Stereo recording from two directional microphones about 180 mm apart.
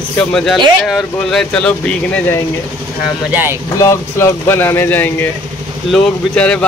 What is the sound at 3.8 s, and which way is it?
Speech, 15° left (ahead or behind).